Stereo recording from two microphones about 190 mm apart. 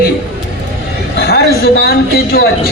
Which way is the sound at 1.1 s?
60° left (ahead or behind).